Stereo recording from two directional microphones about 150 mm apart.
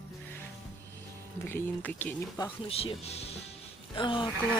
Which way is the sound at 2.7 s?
40° left (ahead or behind).